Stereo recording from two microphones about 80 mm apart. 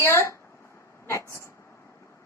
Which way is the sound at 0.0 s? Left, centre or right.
Left.